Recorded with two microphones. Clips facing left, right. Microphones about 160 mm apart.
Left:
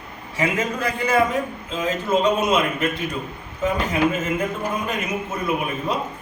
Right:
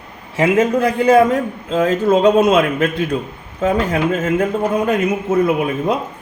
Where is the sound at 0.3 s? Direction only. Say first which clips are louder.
Right 9 dB; 55° right (ahead or behind); by 4.9 s 70° right (ahead or behind).